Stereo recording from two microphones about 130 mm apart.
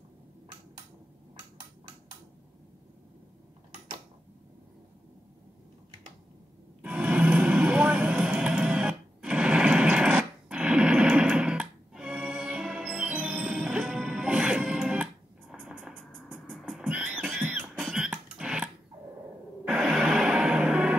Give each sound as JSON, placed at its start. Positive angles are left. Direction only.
{"t": 6.8, "sound": "vehicle", "side_deg": -10}
{"t": 16.2, "sound": "music", "side_deg": 0}
{"t": 17.8, "sound": "a sound", "side_deg": -5}
{"t": 19.6, "sound": "music", "side_deg": -5}